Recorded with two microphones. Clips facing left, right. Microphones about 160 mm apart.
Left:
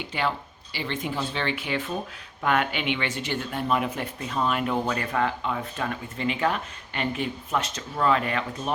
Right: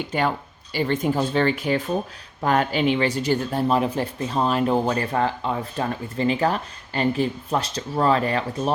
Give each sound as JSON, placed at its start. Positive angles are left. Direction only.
{"t": 0.0, "sound": "speech", "side_deg": -45}